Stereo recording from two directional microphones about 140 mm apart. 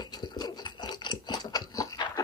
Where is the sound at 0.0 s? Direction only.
30° left (ahead or behind).